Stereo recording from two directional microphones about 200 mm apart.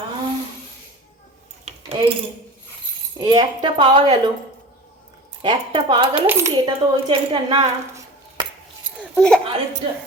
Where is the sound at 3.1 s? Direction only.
20° right (ahead or behind).